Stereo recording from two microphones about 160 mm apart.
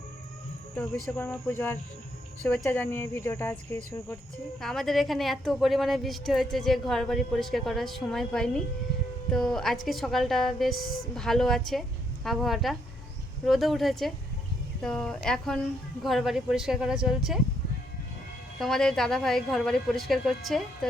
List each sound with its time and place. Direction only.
0.8 s speech: 10° left (ahead or behind)
4.6 s a woman's voice: centre (ahead or behind)
10.8 s speech: 65° left (ahead or behind)
11.1 s a woman's voice: centre (ahead or behind)
18.6 s a woman's voice: centre (ahead or behind)